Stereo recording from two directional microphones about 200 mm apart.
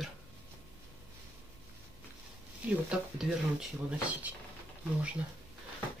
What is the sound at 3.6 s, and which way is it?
Speech, 5° right (ahead or behind).